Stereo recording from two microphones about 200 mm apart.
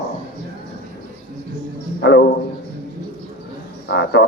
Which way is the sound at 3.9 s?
55° left (ahead or behind).